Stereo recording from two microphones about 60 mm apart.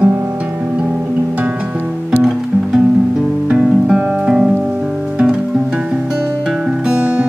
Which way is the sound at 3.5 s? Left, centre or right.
Centre.